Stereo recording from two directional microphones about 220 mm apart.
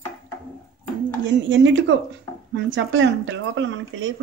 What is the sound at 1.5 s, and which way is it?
A woman's voice, 55° right (ahead or behind).